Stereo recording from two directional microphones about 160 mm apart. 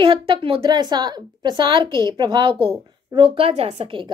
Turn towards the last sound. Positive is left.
turn(degrees=-30)  # may be behind; listen again after turning